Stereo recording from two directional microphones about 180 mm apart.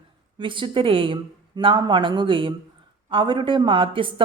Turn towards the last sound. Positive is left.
turn(degrees=-30)  # may be behind; listen again after turning